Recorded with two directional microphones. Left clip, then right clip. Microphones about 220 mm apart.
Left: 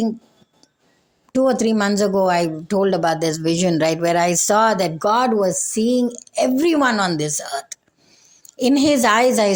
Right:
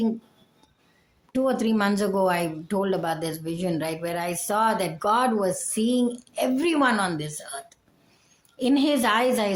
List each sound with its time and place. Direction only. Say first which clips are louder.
1.3 s speech: left 7 dB; 25° left (ahead or behind)